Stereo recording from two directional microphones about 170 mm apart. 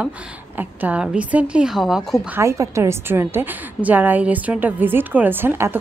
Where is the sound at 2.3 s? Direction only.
15° right (ahead or behind).